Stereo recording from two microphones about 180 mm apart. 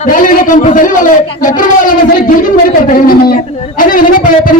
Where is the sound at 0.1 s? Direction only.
45° left (ahead or behind).